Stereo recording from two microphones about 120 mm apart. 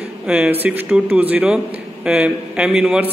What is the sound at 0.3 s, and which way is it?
A man's voice, 10° right (ahead or behind).